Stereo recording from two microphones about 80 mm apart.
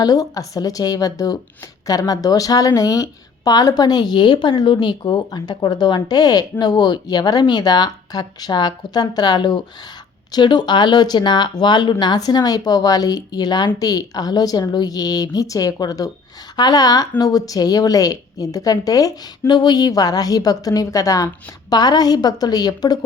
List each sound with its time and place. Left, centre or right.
0.0 s a woman's voice: left
19.5 s a woman's voice: left
21.7 s a woman's voice: left